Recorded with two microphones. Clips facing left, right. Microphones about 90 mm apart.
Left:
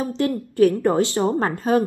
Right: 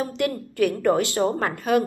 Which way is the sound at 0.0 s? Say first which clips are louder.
Left 2 dB; 25° left (ahead or behind).